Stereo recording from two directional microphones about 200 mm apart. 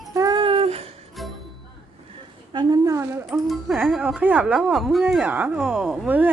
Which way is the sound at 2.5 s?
20° right (ahead or behind).